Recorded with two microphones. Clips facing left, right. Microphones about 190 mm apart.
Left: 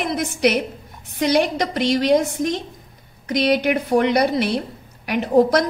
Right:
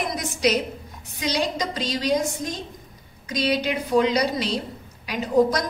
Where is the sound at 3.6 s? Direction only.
60° left (ahead or behind).